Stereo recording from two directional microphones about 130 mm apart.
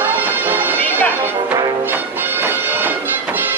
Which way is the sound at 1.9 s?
15° right (ahead or behind).